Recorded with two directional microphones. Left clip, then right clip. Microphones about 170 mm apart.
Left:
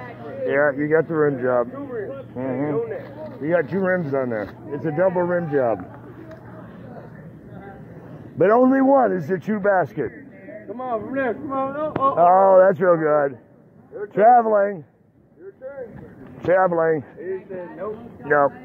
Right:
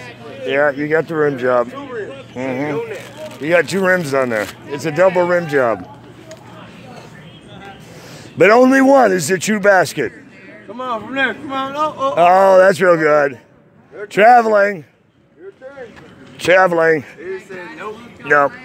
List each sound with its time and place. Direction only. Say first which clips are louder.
0.5 s speech: right 4 dB; 40° right (ahead or behind)
1.9 s a sound: right 3 dB; 25° right (ahead or behind)
2.3 s speech: right 4 dB; 35° right (ahead or behind)
3.7 s speech: right 7 dB; 65° right (ahead or behind)
4.1 s speech: right 7 dB; 55° right (ahead or behind)
8.4 s a man's voice: right 6 dB; 65° right (ahead or behind)
10.8 s speech: right 6 dB; 40° right (ahead or behind)
12.2 s a man's voice: right 4 dB; 70° right (ahead or behind)
16.3 s speech: right 6 dB; 55° right (ahead or behind)
17.7 s speech: right 2 dB; 45° right (ahead or behind)